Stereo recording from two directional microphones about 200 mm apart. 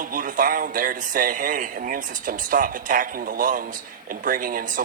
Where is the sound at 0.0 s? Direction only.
40° right (ahead or behind).